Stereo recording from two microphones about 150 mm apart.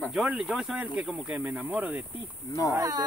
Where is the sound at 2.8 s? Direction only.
25° right (ahead or behind).